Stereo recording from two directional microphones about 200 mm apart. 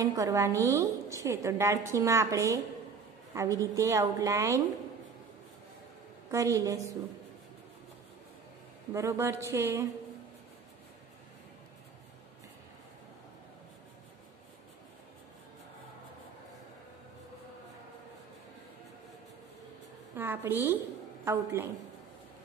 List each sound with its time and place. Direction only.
0.0 s a woman's voice: 15° right (ahead or behind)
6.3 s a woman's voice: 15° right (ahead or behind)
8.9 s a woman's voice: 15° right (ahead or behind)
20.2 s a woman's voice: 10° right (ahead or behind)